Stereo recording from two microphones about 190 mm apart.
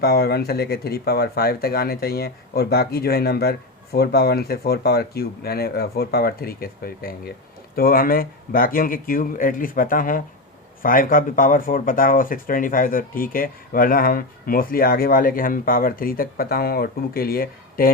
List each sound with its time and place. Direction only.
0.0 s speech: 55° left (ahead or behind)